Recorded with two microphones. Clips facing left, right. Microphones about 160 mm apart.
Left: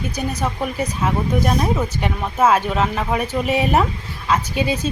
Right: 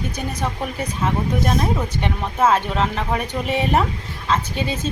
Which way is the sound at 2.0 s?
10° left (ahead or behind).